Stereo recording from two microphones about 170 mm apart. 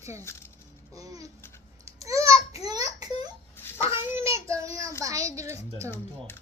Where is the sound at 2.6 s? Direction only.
20° right (ahead or behind).